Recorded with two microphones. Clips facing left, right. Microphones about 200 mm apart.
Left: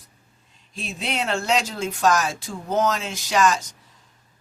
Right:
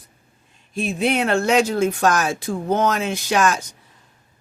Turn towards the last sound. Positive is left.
turn(degrees=-55)  # may be behind; listen again after turning